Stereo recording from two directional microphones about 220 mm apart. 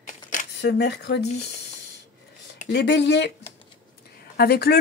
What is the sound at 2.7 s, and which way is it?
Speech, 50° left (ahead or behind).